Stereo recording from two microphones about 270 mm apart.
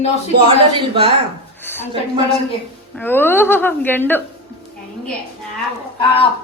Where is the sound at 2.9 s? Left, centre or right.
Centre.